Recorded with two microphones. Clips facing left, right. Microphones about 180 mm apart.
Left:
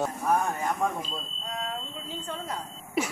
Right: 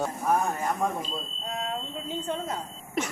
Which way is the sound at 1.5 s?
25° right (ahead or behind).